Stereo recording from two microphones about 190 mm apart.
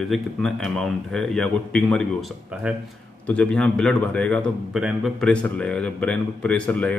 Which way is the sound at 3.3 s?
5° left (ahead or behind).